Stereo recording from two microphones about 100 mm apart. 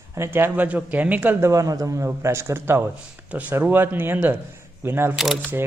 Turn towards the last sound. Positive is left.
turn(degrees=-5)  # may be behind; listen again after turning